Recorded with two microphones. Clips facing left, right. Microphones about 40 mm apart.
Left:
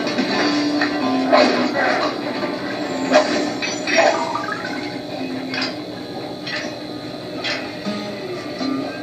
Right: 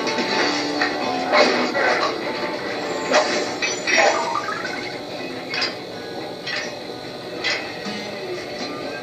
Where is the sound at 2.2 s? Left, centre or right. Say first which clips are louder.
Left 2 dB; centre.